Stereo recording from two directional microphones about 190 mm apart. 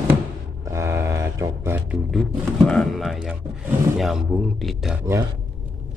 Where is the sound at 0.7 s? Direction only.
15° right (ahead or behind).